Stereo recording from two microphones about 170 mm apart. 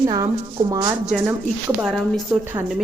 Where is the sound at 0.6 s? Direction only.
35° right (ahead or behind).